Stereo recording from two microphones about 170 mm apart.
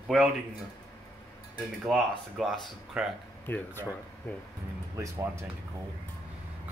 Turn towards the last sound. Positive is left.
turn(degrees=-15)  # may be behind; listen again after turning